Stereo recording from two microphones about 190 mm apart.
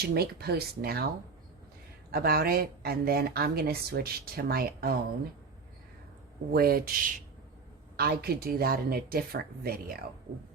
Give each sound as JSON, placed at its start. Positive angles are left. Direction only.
{"t": 0.0, "sound": "speech", "side_deg": -55}
{"t": 2.1, "sound": "speech", "side_deg": -50}
{"t": 6.5, "sound": "speech", "side_deg": -50}